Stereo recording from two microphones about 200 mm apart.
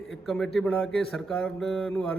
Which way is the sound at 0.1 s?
Centre (ahead or behind).